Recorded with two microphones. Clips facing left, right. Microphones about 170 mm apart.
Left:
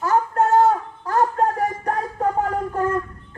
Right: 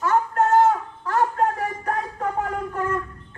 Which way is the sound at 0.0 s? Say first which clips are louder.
Left 1 dB; 35° left (ahead or behind).